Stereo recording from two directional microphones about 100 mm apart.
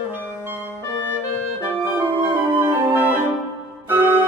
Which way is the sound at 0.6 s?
25° left (ahead or behind).